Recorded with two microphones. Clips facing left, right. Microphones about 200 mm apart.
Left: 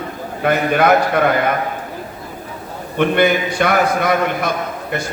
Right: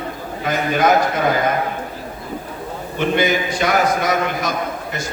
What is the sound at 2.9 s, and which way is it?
A man's voice, 60° left (ahead or behind).